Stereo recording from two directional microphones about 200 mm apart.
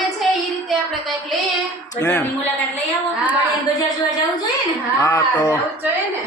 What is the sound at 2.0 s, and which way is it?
Speech, 10° left (ahead or behind).